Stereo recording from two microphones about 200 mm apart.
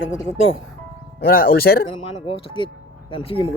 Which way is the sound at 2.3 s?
25° left (ahead or behind).